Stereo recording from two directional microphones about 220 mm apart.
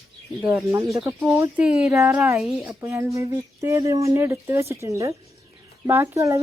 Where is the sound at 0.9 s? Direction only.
15° right (ahead or behind).